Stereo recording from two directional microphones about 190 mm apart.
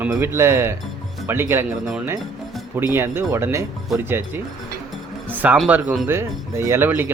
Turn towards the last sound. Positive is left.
turn(degrees=-10)  # may be behind; listen again after turning